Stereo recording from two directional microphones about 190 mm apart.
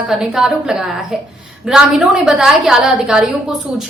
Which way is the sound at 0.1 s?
Centre (ahead or behind).